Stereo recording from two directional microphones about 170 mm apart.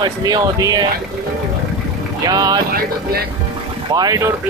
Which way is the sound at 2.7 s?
65° right (ahead or behind).